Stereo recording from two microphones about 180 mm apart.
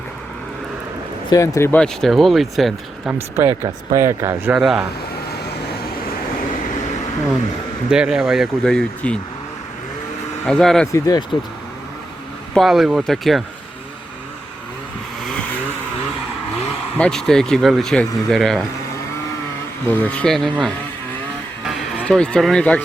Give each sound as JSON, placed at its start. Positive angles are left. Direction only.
{"t": 1.3, "sound": "speech", "side_deg": 15}
{"t": 3.6, "sound": "speech", "side_deg": -15}
{"t": 7.9, "sound": "speech", "side_deg": -5}
{"t": 10.4, "sound": "speech", "side_deg": 5}
{"t": 10.9, "sound": "speech", "side_deg": 20}
{"t": 12.5, "sound": "speech", "side_deg": 0}
{"t": 17.0, "sound": "speech", "side_deg": 0}
{"t": 19.9, "sound": "speech", "side_deg": 10}